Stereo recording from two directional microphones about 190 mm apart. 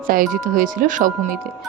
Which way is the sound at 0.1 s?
50° right (ahead or behind).